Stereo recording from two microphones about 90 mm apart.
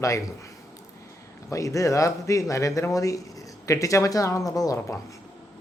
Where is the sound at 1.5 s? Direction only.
35° left (ahead or behind).